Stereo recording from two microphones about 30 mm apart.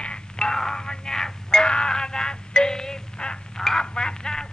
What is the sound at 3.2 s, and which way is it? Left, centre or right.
Quack, left.